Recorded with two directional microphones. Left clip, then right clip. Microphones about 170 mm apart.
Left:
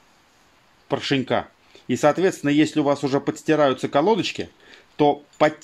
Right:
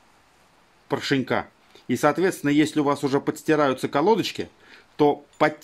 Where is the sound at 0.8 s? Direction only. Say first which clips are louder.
Left 1 dB; 25° left (ahead or behind).